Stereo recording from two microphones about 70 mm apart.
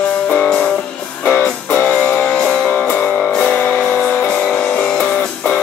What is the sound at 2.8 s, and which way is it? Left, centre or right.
Music, left.